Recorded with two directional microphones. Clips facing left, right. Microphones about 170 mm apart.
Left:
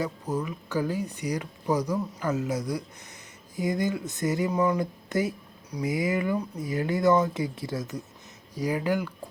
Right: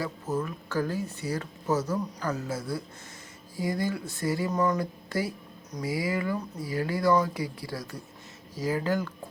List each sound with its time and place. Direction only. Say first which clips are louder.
0.0 s speech: left 1 dB; 15° left (ahead or behind)